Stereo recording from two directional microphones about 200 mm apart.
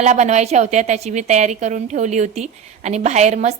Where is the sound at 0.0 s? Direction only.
35° right (ahead or behind).